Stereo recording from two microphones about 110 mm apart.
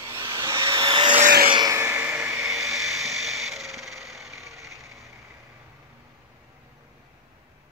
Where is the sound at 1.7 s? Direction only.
20° right (ahead or behind).